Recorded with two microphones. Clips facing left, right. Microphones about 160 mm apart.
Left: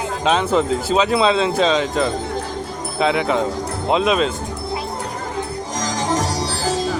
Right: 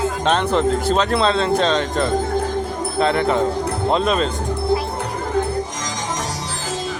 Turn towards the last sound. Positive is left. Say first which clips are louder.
# left 5 dB
turn(degrees=35)  # may be behind; listen again after turning